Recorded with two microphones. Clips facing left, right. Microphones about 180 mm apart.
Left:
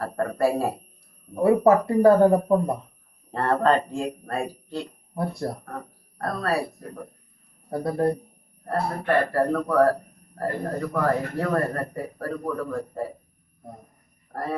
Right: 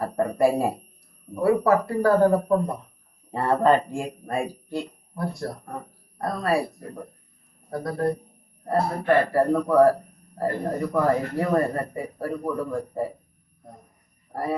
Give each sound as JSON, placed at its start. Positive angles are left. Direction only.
{"t": 0.0, "sound": "a man's voice", "side_deg": -15}
{"t": 1.4, "sound": "speech", "side_deg": 25}
{"t": 3.3, "sound": "a man's voice", "side_deg": -10}
{"t": 5.1, "sound": "speech", "side_deg": 25}
{"t": 5.6, "sound": "speech", "side_deg": -10}
{"t": 8.6, "sound": "a man's voice", "side_deg": -10}
{"t": 14.3, "sound": "a man's voice", "side_deg": -10}